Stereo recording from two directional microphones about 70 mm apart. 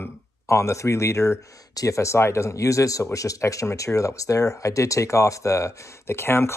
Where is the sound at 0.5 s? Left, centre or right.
Left.